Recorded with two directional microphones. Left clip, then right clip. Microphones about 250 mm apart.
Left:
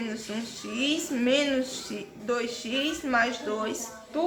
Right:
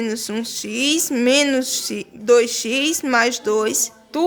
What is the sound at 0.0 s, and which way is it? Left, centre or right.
Speech, right.